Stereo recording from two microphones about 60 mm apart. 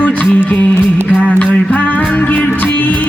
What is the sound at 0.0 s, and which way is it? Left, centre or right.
Music, left.